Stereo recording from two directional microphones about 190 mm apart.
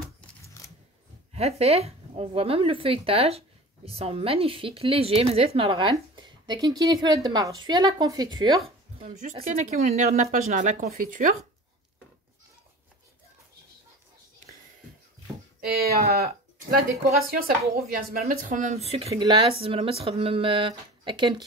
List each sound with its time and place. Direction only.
1.3 s speech: 35° right (ahead or behind)
9.5 s speech: 40° right (ahead or behind)
15.6 s speech: 55° right (ahead or behind)
17.4 s speech: 50° right (ahead or behind); by 21.4 s 25° right (ahead or behind)